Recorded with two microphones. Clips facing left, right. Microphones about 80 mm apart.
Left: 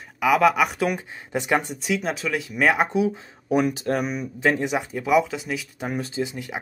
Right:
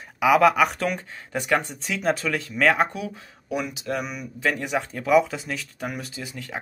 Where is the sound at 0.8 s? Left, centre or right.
Centre.